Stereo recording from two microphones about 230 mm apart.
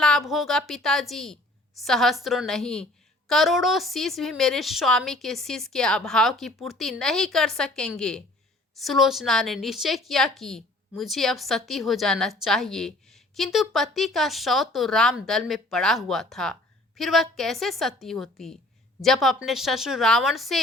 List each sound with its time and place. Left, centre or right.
0.0 s a woman's voice: centre